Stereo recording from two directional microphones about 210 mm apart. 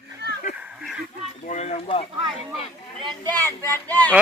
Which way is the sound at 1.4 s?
35° left (ahead or behind).